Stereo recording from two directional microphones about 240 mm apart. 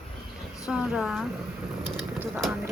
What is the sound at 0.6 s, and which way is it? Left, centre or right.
Speech, centre.